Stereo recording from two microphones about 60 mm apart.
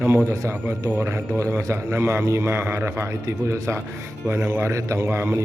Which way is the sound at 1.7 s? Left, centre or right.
Right.